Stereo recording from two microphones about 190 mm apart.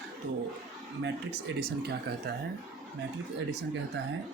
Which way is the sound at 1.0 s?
60° right (ahead or behind).